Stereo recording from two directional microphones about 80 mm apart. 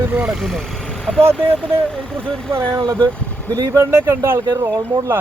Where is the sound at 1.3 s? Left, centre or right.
Centre.